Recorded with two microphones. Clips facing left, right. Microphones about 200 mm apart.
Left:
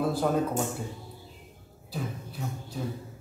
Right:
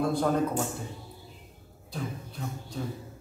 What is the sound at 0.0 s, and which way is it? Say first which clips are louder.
Speech: even; 5° left (ahead or behind).